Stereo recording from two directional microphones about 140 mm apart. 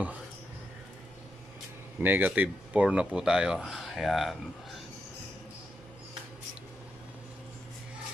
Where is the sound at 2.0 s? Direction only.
10° right (ahead or behind).